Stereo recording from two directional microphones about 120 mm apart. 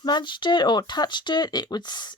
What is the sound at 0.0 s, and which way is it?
Speech, 40° left (ahead or behind).